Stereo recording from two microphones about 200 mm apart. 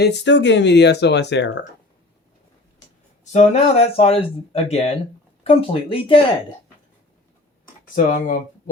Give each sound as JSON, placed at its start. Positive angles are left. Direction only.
{"t": 0.0, "sound": "speech", "side_deg": 65}
{"t": 3.3, "sound": "speech", "side_deg": 35}
{"t": 7.9, "sound": "speech", "side_deg": 40}